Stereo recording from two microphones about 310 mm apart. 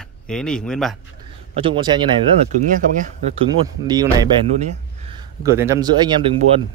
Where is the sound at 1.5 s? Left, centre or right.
Centre.